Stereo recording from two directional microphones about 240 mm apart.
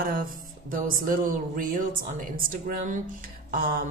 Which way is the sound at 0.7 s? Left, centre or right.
Right.